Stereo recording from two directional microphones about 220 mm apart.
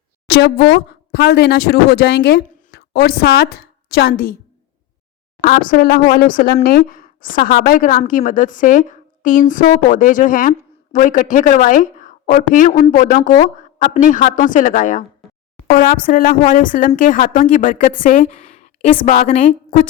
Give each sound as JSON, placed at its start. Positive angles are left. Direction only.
{"t": 0.3, "sound": "a woman's voice", "side_deg": 50}
{"t": 5.4, "sound": "speech", "side_deg": 40}